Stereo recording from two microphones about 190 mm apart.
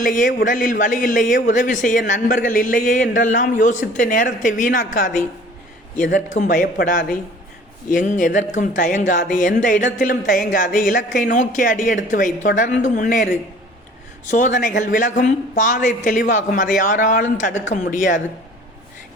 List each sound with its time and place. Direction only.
0.0 s a man's voice: 45° left (ahead or behind)
14.3 s a man's voice: 40° left (ahead or behind)